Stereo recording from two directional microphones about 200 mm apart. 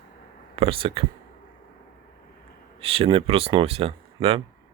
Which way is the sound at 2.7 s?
30° right (ahead or behind).